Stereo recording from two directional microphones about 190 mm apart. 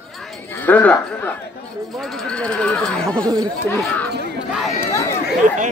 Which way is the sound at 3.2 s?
20° right (ahead or behind).